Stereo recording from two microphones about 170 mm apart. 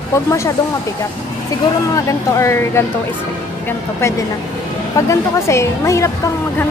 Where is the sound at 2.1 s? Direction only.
15° left (ahead or behind).